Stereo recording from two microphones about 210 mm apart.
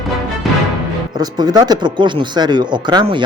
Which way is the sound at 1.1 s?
20° right (ahead or behind).